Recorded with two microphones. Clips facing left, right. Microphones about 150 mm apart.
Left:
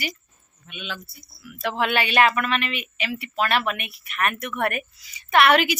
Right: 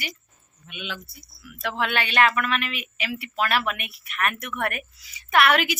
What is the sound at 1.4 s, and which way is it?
A woman's voice, centre (ahead or behind).